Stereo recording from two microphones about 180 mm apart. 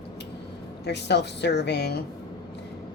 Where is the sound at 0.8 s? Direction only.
70° left (ahead or behind).